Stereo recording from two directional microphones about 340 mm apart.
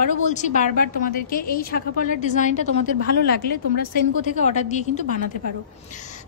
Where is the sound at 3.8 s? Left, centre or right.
Left.